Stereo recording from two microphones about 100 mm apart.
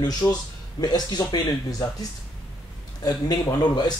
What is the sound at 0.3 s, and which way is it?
Speech, 40° left (ahead or behind).